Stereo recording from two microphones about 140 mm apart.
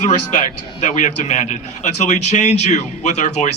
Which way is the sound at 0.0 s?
60° left (ahead or behind).